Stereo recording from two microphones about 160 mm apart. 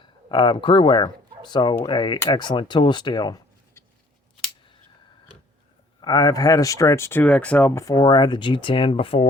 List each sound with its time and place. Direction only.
0.0 s speech: 30° left (ahead or behind)
6.0 s speech: 25° left (ahead or behind)
7.9 s speech: 30° left (ahead or behind)